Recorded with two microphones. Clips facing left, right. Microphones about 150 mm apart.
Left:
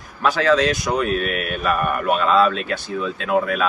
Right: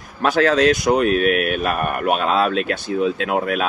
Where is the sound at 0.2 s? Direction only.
55° right (ahead or behind).